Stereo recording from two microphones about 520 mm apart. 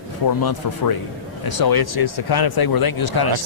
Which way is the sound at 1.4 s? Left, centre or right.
Left.